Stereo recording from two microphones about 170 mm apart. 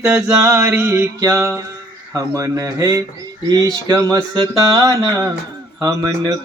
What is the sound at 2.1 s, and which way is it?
Music, 20° right (ahead or behind).